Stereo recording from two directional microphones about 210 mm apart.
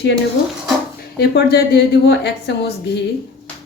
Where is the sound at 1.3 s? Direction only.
50° left (ahead or behind).